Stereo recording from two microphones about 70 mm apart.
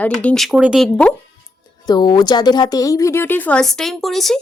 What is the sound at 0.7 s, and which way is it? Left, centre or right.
Speech, centre.